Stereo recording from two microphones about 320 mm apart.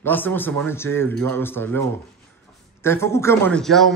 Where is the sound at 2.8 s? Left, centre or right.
Centre.